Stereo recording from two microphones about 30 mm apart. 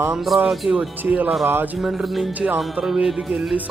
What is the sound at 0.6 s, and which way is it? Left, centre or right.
Speech, right.